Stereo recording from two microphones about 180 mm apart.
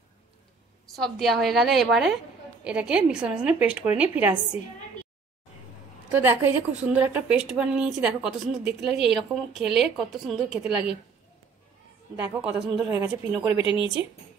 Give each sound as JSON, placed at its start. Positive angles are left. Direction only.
{"t": 0.8, "sound": "a woman's voice", "side_deg": 0}
{"t": 6.1, "sound": "a woman's voice", "side_deg": -10}
{"t": 12.2, "sound": "a woman's voice", "side_deg": -10}
{"t": 13.7, "sound": "speech", "side_deg": 30}